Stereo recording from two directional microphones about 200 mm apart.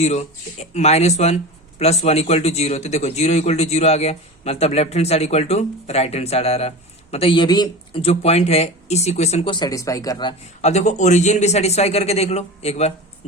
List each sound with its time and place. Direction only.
0.0 s speech: 35° left (ahead or behind)
10.6 s speech: 35° left (ahead or behind)